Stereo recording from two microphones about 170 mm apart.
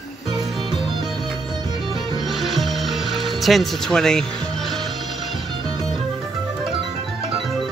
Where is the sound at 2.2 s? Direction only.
Centre (ahead or behind).